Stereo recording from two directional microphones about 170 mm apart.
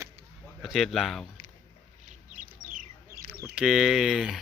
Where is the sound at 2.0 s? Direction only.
50° right (ahead or behind).